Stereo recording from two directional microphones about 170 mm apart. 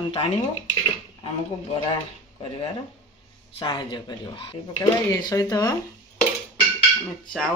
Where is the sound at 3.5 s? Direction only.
25° left (ahead or behind).